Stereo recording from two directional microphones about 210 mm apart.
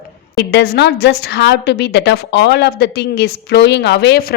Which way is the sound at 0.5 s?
50° left (ahead or behind).